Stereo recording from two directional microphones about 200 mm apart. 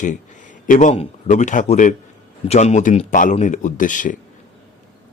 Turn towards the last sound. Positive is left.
turn(degrees=40)  # may be behind; listen again after turning